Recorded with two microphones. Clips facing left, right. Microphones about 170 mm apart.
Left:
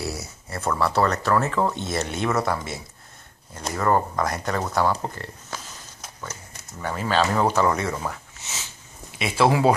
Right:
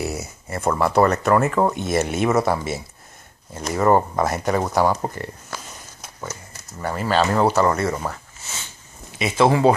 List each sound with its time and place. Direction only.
0.0 s speech: 20° right (ahead or behind)
6.8 s speech: 10° right (ahead or behind)
8.1 s a sound: centre (ahead or behind)
9.2 s speech: 5° left (ahead or behind)